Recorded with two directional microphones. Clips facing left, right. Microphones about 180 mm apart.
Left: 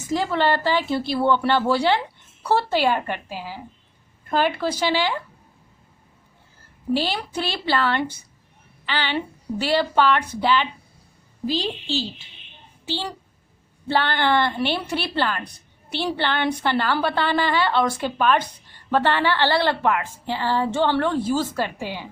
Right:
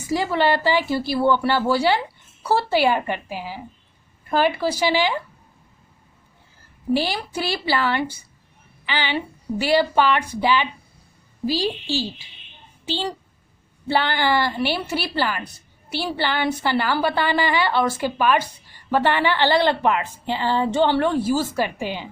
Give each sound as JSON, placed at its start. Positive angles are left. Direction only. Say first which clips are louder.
{"t": 0.1, "sound": "a woman's voice", "louder": "right 1 dB", "side_deg": -10}
{"t": 6.9, "sound": "a woman's voice", "louder": "right 1 dB", "side_deg": -10}
{"t": 12.8, "sound": "a sound", "louder": "right 2 dB", "side_deg": -15}
{"t": 13.8, "sound": "a woman's voice", "louder": "even", "side_deg": -10}